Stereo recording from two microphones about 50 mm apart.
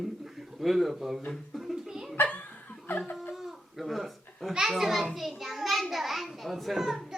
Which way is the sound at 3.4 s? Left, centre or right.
Centre.